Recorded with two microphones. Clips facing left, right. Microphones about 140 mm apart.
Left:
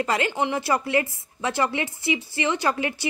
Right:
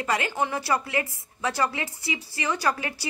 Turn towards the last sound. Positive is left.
turn(degrees=25)  # may be behind; listen again after turning